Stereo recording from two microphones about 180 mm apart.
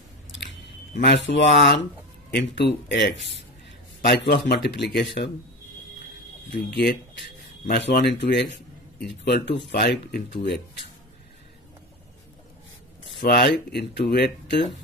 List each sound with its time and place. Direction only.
1.0 s a man's voice: 75° left (ahead or behind)
6.5 s a man's voice: 70° left (ahead or behind)
13.2 s speech: 60° left (ahead or behind)